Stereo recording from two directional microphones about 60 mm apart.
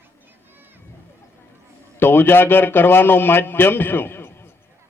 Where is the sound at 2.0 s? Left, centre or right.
Left.